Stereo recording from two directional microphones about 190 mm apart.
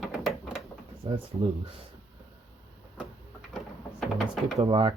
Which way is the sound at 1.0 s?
30° right (ahead or behind).